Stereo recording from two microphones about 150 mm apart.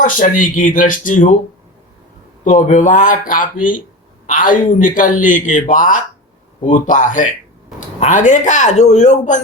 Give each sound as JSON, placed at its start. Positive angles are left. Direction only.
{"t": 0.0, "sound": "speech", "side_deg": 60}
{"t": 2.4, "sound": "speech", "side_deg": 55}